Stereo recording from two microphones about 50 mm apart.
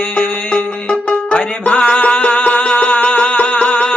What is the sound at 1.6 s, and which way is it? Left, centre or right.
Music, left.